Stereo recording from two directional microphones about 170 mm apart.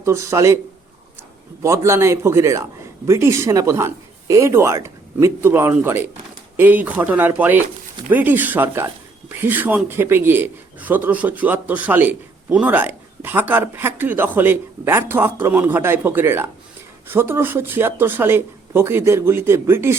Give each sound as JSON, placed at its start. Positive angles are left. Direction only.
{"t": 0.0, "sound": "a man's voice", "side_deg": -15}
{"t": 1.6, "sound": "a man's voice", "side_deg": -15}